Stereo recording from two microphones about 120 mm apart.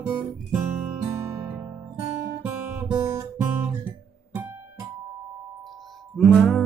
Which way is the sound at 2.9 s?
25° right (ahead or behind).